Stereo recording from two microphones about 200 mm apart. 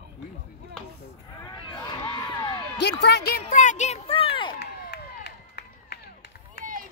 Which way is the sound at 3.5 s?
40° left (ahead or behind).